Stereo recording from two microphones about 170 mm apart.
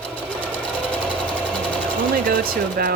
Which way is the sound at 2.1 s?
55° right (ahead or behind).